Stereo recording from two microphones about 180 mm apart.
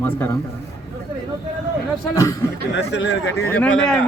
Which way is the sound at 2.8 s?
75° left (ahead or behind).